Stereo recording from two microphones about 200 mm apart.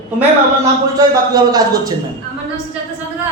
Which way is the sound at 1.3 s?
20° right (ahead or behind).